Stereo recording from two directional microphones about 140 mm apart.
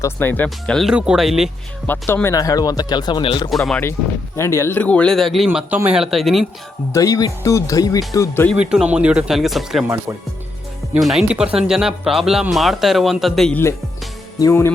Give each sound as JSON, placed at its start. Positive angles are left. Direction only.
{"t": 0.0, "sound": "speech", "side_deg": 15}
{"t": 1.9, "sound": "speech", "side_deg": 15}
{"t": 3.7, "sound": "speech", "side_deg": 15}
{"t": 5.5, "sound": "speech", "side_deg": -10}
{"t": 6.9, "sound": "speech", "side_deg": 25}
{"t": 8.5, "sound": "speech", "side_deg": -5}
{"t": 9.8, "sound": "speech", "side_deg": -20}
{"t": 11.0, "sound": "speech", "side_deg": 0}
{"t": 13.5, "sound": "speech", "side_deg": 15}